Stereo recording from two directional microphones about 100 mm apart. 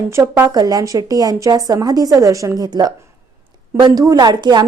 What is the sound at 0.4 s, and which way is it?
A woman's voice, 40° right (ahead or behind).